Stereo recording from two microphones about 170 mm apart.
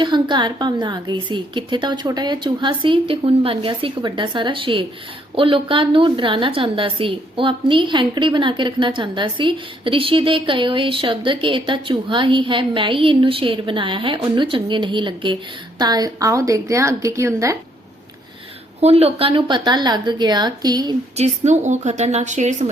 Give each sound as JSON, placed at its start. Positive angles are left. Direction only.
{"t": 0.0, "sound": "a woman's voice", "side_deg": -25}
{"t": 18.8, "sound": "a woman's voice", "side_deg": -40}
{"t": 21.2, "sound": "a woman's voice", "side_deg": -45}